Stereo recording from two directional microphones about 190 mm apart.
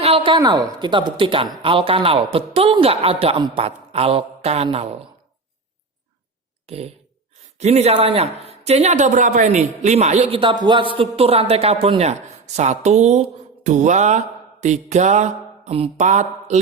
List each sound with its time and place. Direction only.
0.0 s a woman's voice: 30° right (ahead or behind)
6.7 s a man's voice: 35° right (ahead or behind)
14.6 s mantra: 40° right (ahead or behind)